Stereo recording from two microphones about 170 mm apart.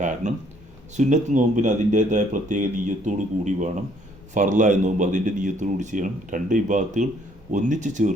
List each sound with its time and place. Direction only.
0.0 s speech: 45° right (ahead or behind)